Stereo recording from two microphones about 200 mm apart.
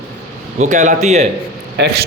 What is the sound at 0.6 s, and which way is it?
Speech, 35° right (ahead or behind).